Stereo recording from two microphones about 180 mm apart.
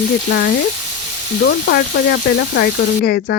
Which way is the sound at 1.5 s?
65° left (ahead or behind).